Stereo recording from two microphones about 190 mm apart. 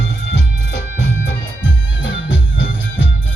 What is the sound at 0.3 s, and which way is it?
Music, 65° left (ahead or behind).